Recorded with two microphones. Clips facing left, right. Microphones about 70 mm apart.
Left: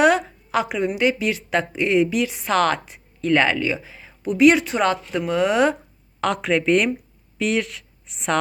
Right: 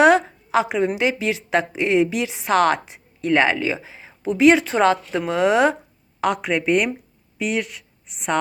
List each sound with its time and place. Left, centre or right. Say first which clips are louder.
0.5 s a woman's voice: right 2 dB; right
6.1 s speech: even; centre